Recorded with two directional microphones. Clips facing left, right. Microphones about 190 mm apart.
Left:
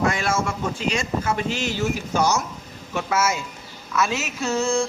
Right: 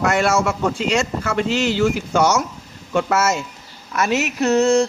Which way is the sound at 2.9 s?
55° right (ahead or behind).